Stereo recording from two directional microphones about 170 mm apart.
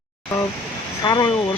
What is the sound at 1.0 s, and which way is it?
Speech, 25° left (ahead or behind).